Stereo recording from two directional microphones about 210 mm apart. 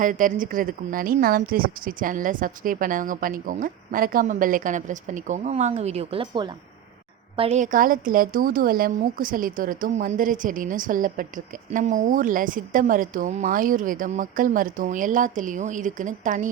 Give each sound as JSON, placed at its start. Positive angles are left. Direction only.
{"t": 0.0, "sound": "speech", "side_deg": -40}